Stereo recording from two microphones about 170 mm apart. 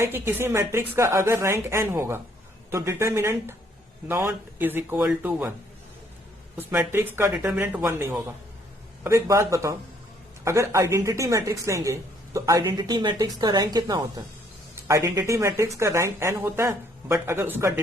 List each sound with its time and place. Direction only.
0.0 s speech: 15° right (ahead or behind)
6.6 s a woman's voice: 15° right (ahead or behind)